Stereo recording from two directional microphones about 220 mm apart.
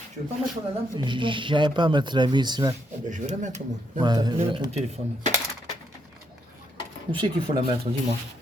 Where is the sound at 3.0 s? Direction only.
35° right (ahead or behind).